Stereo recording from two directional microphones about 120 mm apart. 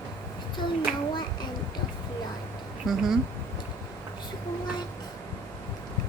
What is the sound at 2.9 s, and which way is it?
Speech, centre (ahead or behind).